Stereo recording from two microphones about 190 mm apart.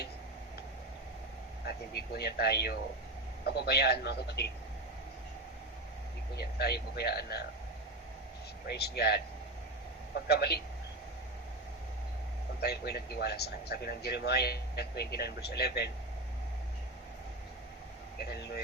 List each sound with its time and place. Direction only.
1.6 s speech: 55° left (ahead or behind)
6.3 s speech: 55° left (ahead or behind)
8.6 s speech: 60° left (ahead or behind)
12.5 s speech: 55° left (ahead or behind)
18.2 s speech: 60° left (ahead or behind)